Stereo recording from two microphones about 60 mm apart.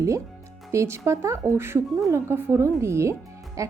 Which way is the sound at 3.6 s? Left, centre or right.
Right.